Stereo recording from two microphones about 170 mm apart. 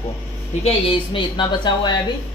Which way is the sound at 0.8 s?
30° left (ahead or behind).